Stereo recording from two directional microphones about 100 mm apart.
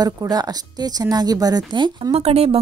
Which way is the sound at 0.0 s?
40° right (ahead or behind).